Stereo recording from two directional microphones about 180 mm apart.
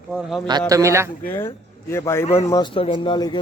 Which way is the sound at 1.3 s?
15° left (ahead or behind).